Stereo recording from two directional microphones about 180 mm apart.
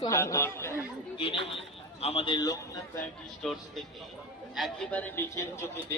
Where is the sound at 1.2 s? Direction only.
30° left (ahead or behind).